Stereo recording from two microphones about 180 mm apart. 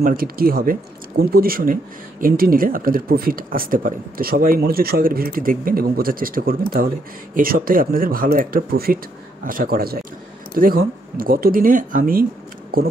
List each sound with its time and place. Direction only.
0.0 s speech: 55° right (ahead or behind)